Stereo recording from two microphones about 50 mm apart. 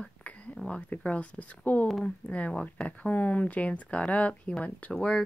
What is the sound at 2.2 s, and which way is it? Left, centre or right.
Speech, left.